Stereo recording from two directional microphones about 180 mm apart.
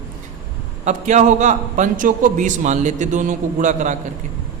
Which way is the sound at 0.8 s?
40° right (ahead or behind).